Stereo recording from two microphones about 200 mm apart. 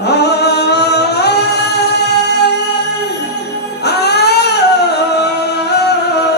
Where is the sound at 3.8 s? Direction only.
55° left (ahead or behind).